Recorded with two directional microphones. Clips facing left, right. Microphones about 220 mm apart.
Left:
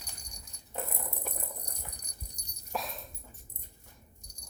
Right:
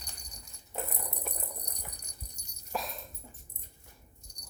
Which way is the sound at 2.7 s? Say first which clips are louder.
Even; centre (ahead or behind).